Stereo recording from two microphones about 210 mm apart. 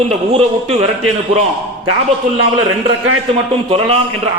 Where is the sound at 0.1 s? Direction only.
30° right (ahead or behind).